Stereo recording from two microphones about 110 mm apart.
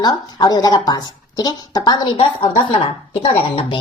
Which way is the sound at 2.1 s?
55° left (ahead or behind).